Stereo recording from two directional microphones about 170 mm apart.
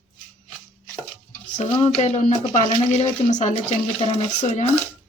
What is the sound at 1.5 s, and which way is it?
Speech, 40° left (ahead or behind).